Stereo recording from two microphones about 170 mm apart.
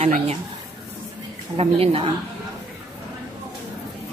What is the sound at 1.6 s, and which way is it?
Speech, 35° right (ahead or behind).